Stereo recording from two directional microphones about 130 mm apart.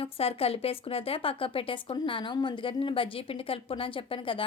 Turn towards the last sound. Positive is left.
turn(degrees=40)  # may be behind; listen again after turning